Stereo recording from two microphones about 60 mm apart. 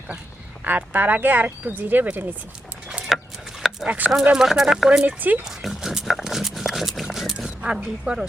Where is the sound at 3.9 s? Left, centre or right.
Right.